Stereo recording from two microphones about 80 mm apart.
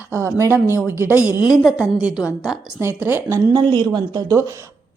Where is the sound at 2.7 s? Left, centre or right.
Right.